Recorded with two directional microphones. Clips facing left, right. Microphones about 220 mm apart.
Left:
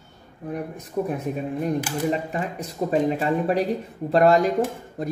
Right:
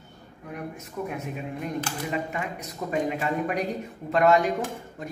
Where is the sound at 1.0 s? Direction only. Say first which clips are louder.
Left 6 dB; 35° left (ahead or behind).